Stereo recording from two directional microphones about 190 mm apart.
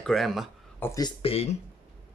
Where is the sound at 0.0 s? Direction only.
Centre (ahead or behind).